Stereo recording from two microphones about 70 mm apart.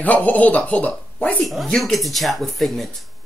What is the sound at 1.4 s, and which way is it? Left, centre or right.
Speech, centre.